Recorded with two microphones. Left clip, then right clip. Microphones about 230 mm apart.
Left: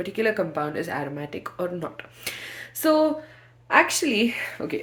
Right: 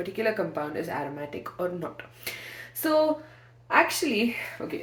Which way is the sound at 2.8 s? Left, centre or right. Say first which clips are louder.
Left 3 dB; left.